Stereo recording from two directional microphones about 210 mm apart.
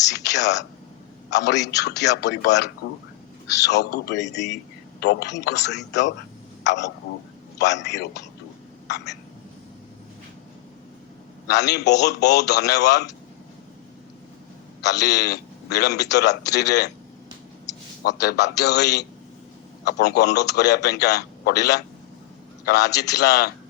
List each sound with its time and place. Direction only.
0.3 s speech: 55° left (ahead or behind)
3.7 s a man's voice: 50° left (ahead or behind)
11.4 s a man's voice: 50° left (ahead or behind)
14.8 s a man's voice: 55° left (ahead or behind)
18.0 s a man's voice: 55° left (ahead or behind)